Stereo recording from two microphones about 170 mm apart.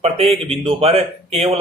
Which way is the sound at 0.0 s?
35° right (ahead or behind).